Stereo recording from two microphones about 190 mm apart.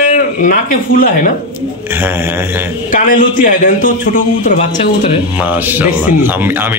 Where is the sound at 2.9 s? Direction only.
45° left (ahead or behind).